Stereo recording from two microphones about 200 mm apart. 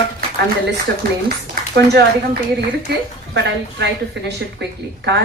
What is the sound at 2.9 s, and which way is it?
A woman's voice, 50° right (ahead or behind).